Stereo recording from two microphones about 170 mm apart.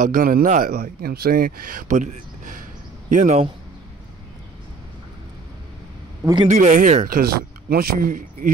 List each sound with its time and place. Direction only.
0.1 s speech: 55° right (ahead or behind)
6.2 s a man's voice: 15° right (ahead or behind)
6.5 s speech: 45° right (ahead or behind)